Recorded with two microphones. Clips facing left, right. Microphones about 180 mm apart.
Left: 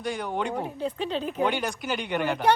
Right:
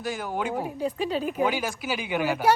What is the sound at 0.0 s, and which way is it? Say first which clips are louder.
Speech: even; centre (ahead or behind).